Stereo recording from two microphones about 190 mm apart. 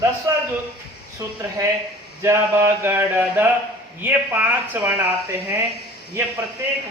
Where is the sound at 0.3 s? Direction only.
15° right (ahead or behind).